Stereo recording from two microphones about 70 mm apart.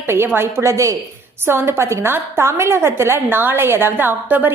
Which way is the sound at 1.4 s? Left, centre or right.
Right.